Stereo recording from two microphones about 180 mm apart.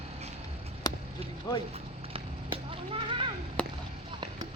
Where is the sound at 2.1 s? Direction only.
30° right (ahead or behind).